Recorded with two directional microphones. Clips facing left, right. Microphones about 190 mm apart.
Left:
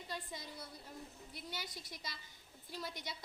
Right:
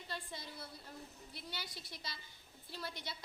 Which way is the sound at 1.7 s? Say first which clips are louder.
Left 1 dB; 45° left (ahead or behind).